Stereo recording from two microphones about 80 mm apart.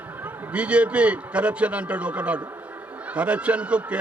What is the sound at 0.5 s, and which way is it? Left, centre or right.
A man's voice, centre.